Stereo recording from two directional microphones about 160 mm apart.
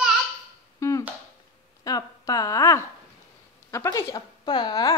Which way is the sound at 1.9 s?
25° left (ahead or behind).